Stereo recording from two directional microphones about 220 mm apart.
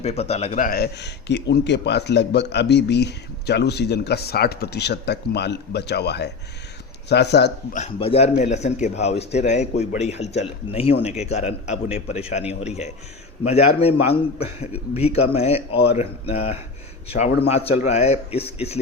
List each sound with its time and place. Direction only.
0.0 s a man's voice: 30° left (ahead or behind); by 7.8 s 50° left (ahead or behind)
7.8 s a man's voice: 25° left (ahead or behind)
13.4 s a man's voice: 30° left (ahead or behind)